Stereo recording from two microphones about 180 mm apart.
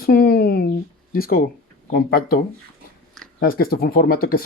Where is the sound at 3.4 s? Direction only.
55° left (ahead or behind).